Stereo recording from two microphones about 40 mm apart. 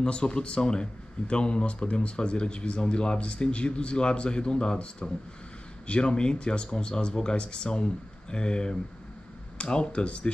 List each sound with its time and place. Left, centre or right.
0.0 s speech: left